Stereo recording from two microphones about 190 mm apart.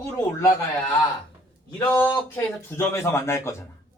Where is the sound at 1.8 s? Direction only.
10° left (ahead or behind).